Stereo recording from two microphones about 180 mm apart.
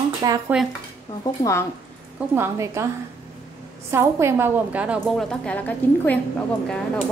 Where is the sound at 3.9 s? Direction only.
15° right (ahead or behind).